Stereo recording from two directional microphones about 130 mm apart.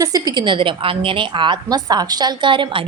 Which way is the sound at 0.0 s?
30° right (ahead or behind).